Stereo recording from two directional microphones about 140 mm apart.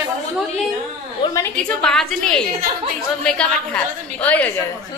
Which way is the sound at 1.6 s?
5° left (ahead or behind).